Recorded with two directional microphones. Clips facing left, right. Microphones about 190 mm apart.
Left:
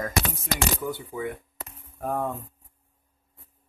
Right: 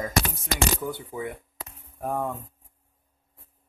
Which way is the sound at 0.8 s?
15° right (ahead or behind).